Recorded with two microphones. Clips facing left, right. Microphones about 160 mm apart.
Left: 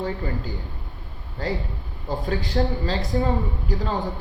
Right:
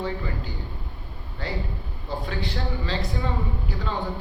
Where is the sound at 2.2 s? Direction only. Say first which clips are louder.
Left 9 dB; 40° left (ahead or behind).